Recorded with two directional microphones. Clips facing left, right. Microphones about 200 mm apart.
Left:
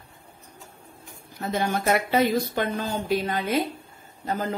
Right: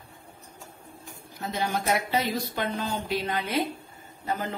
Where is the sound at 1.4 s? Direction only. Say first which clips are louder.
Left 3 dB; 55° left (ahead or behind).